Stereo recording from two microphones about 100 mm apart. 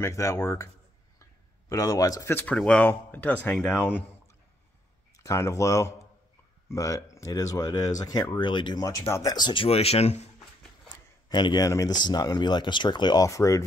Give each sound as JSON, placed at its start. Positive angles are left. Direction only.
{"t": 0.0, "sound": "speech", "side_deg": 30}
{"t": 1.7, "sound": "speech", "side_deg": 35}
{"t": 2.4, "sound": "speech", "side_deg": 10}
{"t": 5.1, "sound": "speech", "side_deg": 30}
{"t": 8.8, "sound": "speech", "side_deg": 30}
{"t": 9.3, "sound": "speech", "side_deg": 50}
{"t": 9.7, "sound": "speech", "side_deg": 90}
{"t": 11.2, "sound": "a man's voice", "side_deg": 45}